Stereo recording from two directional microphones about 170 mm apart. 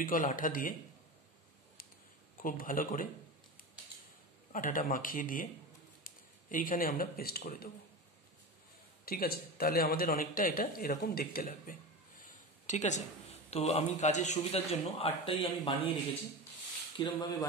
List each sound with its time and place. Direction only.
0.0 s speech: 50° left (ahead or behind)
2.3 s a man's voice: 55° left (ahead or behind)
4.5 s speech: 50° left (ahead or behind)
9.0 s a man's voice: 60° left (ahead or behind); by 15.7 s 35° left (ahead or behind)
17.0 s speech: 25° left (ahead or behind)